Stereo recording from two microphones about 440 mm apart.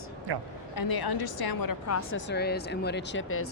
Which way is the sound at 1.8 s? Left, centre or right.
Left.